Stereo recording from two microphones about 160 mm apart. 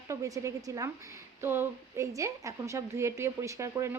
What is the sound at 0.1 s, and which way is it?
A woman's voice, 20° right (ahead or behind).